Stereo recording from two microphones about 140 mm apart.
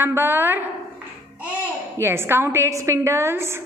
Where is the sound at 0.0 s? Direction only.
15° right (ahead or behind).